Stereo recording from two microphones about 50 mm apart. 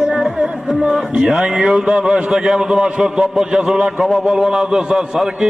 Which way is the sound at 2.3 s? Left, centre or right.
Centre.